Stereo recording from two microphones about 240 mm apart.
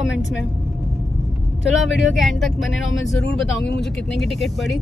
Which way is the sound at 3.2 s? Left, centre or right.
Left.